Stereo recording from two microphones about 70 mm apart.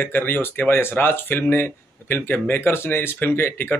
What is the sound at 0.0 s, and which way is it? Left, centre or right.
Speech, left.